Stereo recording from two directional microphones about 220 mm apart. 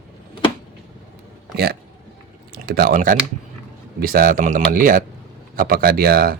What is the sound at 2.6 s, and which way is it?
Speech, 40° right (ahead or behind).